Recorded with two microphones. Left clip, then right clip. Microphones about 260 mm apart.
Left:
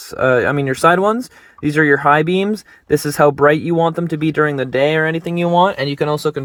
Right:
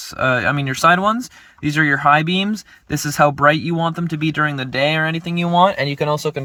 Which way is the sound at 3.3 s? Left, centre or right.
Right.